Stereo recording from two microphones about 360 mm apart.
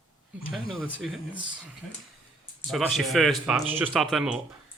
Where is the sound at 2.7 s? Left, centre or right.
Centre.